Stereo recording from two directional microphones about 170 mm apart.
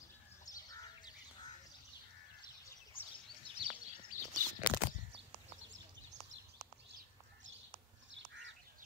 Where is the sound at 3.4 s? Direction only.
30° right (ahead or behind).